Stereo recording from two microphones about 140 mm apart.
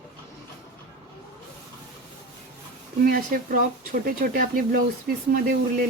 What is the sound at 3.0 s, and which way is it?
Speech, 90° right.